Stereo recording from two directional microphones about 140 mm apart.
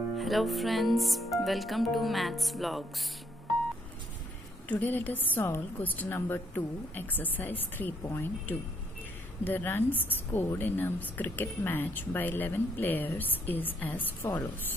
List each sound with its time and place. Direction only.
0.2 s speech: centre (ahead or behind)
4.6 s a woman's voice: 10° left (ahead or behind)